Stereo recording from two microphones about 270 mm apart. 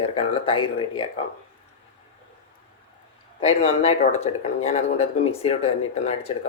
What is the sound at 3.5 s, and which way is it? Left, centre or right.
Speech, left.